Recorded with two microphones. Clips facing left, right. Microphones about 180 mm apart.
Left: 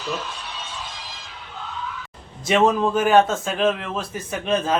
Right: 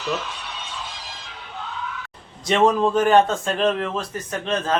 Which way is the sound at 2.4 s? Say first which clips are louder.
Even; 5° left (ahead or behind).